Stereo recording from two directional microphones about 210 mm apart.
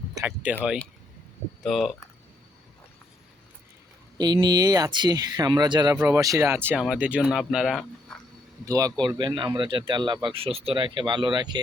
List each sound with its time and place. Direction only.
0.1 s speech: 10° right (ahead or behind)
4.2 s speech: 20° right (ahead or behind); by 7.9 s centre (ahead or behind)
8.6 s speech: 15° right (ahead or behind)